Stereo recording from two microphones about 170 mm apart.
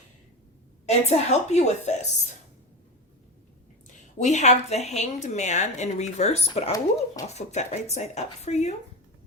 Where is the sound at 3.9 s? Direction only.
45° left (ahead or behind).